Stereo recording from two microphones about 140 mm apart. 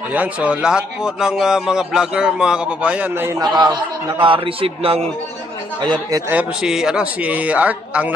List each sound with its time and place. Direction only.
0.1 s a man's voice: 10° right (ahead or behind)
3.5 s a man's voice: 30° right (ahead or behind)
6.3 s a man's voice: 5° right (ahead or behind)